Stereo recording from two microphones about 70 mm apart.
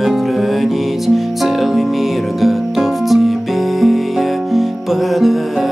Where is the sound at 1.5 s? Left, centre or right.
Centre.